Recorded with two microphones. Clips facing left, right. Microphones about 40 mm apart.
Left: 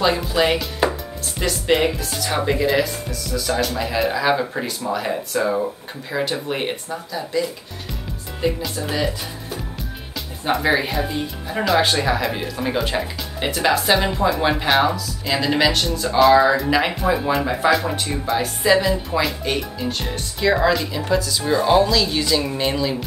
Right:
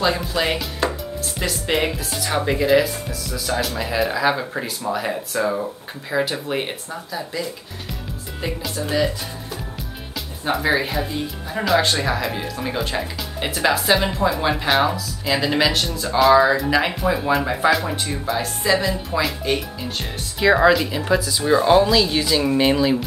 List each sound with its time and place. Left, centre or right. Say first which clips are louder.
0.0 s chopping: left 2 dB; centre
1.4 s speech: left 3 dB; centre
20.4 s speech: right 3 dB; centre